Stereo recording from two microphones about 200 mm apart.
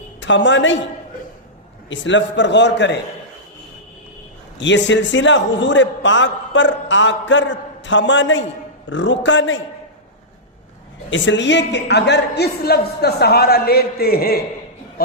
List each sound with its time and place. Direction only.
0.2 s a woman's voice: 65° left (ahead or behind)
1.9 s a man's voice: 65° left (ahead or behind)
4.6 s a man's voice: 65° left (ahead or behind)
11.1 s a man's voice: 65° left (ahead or behind); by 14.3 s 50° left (ahead or behind)